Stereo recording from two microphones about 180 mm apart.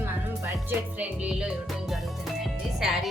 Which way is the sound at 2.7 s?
Centre (ahead or behind).